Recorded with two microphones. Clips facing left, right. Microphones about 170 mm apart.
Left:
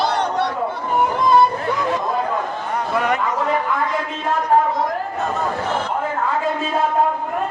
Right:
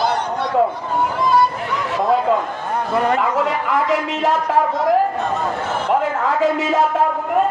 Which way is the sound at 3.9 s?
90° right.